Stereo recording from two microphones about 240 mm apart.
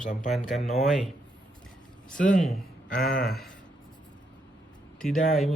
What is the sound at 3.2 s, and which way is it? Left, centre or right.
Speech, centre.